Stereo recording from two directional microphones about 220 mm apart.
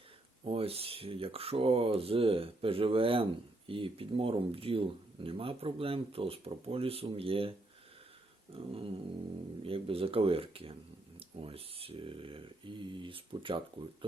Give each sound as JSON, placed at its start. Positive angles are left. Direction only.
{"t": 0.4, "sound": "speech", "side_deg": -25}
{"t": 8.5, "sound": "speech", "side_deg": -25}